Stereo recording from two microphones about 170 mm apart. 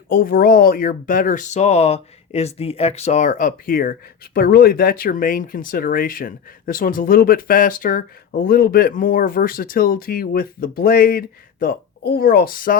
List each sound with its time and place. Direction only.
0.1 s speech: 55° left (ahead or behind)